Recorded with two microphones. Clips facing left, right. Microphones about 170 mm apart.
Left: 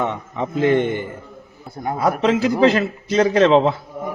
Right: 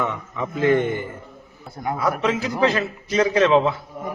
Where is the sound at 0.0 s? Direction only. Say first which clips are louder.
Left 3 dB; 30° left (ahead or behind).